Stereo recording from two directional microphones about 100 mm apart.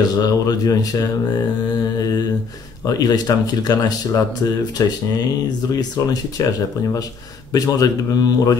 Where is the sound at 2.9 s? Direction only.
40° left (ahead or behind).